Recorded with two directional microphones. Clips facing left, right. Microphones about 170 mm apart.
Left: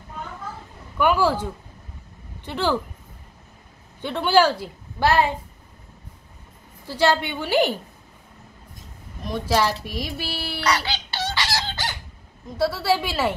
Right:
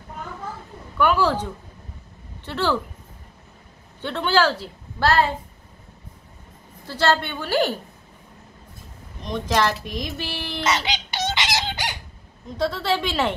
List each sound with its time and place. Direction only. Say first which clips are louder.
0.9 s a woman's voice: even; 10° left (ahead or behind)
4.0 s a woman's voice: left 2 dB; 10° left (ahead or behind)
6.9 s a woman's voice: left 1 dB; 10° left (ahead or behind)
9.2 s a woman's voice: even; 5° left (ahead or behind)
10.6 s chicken: even; 20° right (ahead or behind)
12.5 s a woman's voice: left 2 dB; 10° left (ahead or behind)